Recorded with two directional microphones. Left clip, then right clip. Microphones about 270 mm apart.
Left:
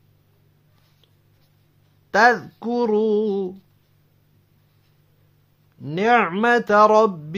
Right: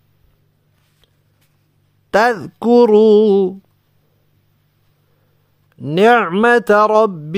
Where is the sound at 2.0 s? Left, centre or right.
Right.